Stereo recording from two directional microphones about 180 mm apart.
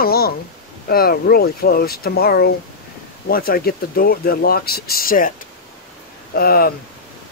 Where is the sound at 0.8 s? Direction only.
55° left (ahead or behind).